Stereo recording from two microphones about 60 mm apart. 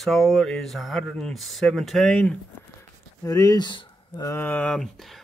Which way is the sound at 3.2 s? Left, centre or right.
Left.